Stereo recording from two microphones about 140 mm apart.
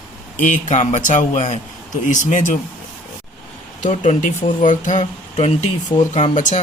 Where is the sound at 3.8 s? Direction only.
60° left (ahead or behind).